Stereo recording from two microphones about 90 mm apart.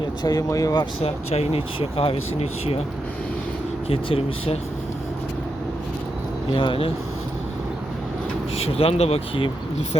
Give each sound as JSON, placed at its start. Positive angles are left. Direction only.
{"t": 0.0, "sound": "speech", "side_deg": 50}
{"t": 1.5, "sound": "speech", "side_deg": 90}
{"t": 3.8, "sound": "speech", "side_deg": 90}
{"t": 6.5, "sound": "speech", "side_deg": 70}
{"t": 8.8, "sound": "speech", "side_deg": 90}